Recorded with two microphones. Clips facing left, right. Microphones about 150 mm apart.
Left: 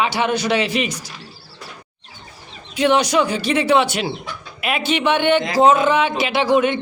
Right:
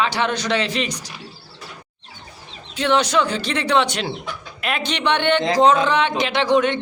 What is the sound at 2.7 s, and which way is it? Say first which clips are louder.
Speech: left 2 dB; 10° left (ahead or behind).